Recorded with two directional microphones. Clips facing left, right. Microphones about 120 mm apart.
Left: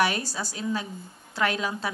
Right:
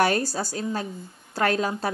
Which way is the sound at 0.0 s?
45° right (ahead or behind).